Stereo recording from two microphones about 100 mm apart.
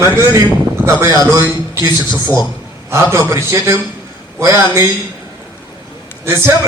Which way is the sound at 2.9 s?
30° right (ahead or behind).